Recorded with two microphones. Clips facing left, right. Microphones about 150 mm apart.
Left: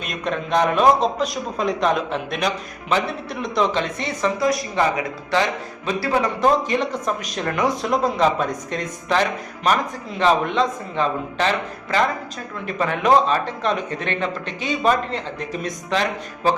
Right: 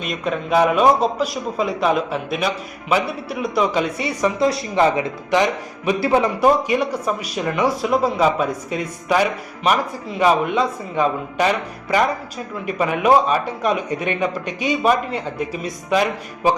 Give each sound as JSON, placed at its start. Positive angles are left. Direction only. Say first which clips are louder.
{"t": 0.0, "sound": "a man's voice", "louder": "right 2 dB", "side_deg": 0}
{"t": 4.4, "sound": "speech", "louder": "right 1 dB", "side_deg": -30}
{"t": 4.7, "sound": "a man's voice", "louder": "right 4 dB", "side_deg": -20}